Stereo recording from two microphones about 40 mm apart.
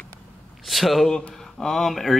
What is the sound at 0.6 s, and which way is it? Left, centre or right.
Speech, centre.